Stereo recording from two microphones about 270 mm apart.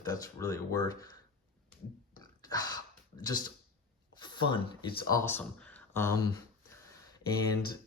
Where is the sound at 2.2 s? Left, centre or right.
Centre.